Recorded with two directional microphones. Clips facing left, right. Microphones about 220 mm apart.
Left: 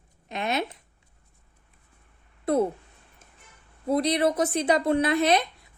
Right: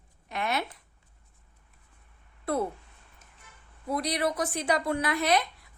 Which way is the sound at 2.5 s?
20° left (ahead or behind).